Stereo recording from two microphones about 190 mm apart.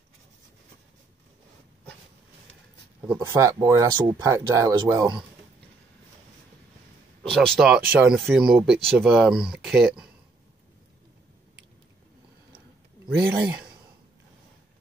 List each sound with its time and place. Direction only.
3.0 s speech: 10° right (ahead or behind)
7.2 s speech: centre (ahead or behind)
13.2 s speech: 10° right (ahead or behind)